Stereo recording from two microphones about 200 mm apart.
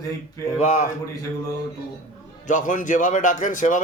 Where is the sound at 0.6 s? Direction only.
35° left (ahead or behind).